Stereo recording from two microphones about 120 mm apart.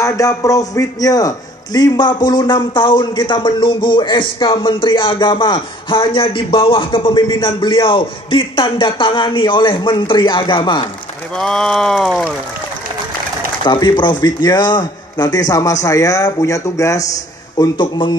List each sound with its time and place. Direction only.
0.0 s a man's voice: 25° left (ahead or behind)
11.3 s a sound: 5° left (ahead or behind)
13.7 s a man's voice: 40° left (ahead or behind)
17.6 s a man's voice: 40° left (ahead or behind)